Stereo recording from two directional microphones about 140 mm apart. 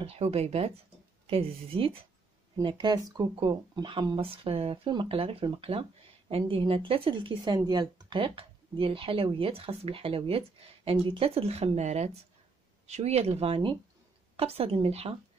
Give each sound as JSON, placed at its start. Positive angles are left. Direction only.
{"t": 0.0, "sound": "speech", "side_deg": -45}
{"t": 2.6, "sound": "speech", "side_deg": -30}